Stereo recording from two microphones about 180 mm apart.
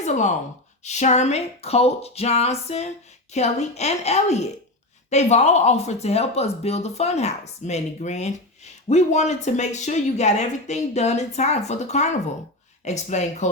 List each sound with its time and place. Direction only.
0.0 s speech: 40° left (ahead or behind)